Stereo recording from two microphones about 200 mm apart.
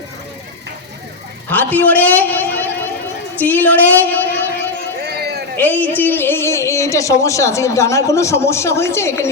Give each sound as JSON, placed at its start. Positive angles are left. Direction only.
{"t": 1.5, "sound": "speech", "side_deg": 10}
{"t": 5.0, "sound": "a sound", "side_deg": -55}
{"t": 5.5, "sound": "speech", "side_deg": 10}